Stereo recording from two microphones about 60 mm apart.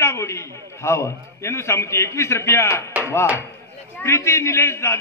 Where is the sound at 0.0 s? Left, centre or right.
Left.